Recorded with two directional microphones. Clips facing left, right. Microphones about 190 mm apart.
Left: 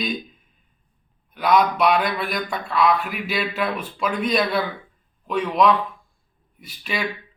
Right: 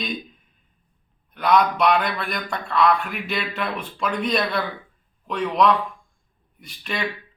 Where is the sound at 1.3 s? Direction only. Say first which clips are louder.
Even; 5° left (ahead or behind).